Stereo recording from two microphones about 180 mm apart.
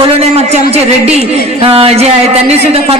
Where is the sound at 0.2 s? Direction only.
35° right (ahead or behind).